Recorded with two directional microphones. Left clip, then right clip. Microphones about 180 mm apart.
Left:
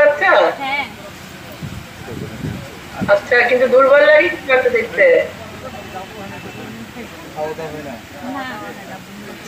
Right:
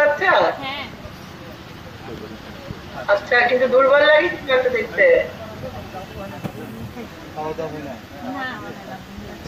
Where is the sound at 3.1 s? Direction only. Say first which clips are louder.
Left 3 dB; 45° left (ahead or behind).